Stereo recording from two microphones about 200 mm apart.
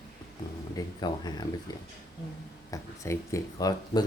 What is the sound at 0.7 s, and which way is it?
Speech, 20° left (ahead or behind).